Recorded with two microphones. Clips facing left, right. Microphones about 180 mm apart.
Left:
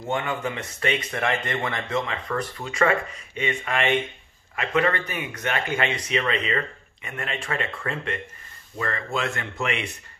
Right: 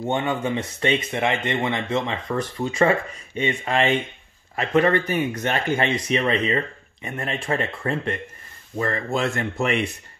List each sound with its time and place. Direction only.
0.0 s speech: 25° right (ahead or behind)